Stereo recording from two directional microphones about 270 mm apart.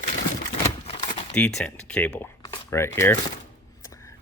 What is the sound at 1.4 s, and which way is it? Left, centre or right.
Speech, centre.